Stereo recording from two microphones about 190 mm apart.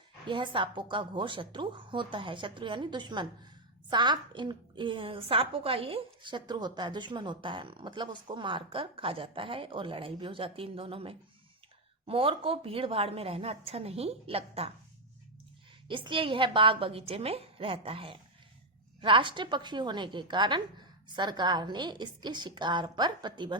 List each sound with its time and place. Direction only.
0.3 s a woman's voice: 25° right (ahead or behind)
15.9 s a woman's voice: 25° right (ahead or behind)